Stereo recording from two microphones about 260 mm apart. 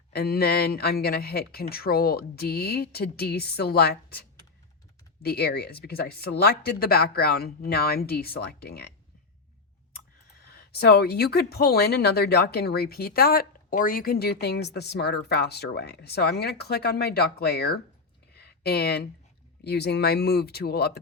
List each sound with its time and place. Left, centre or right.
0.1 s speech: left
10.4 s speech: left
18.3 s a sound: left
19.6 s speech: left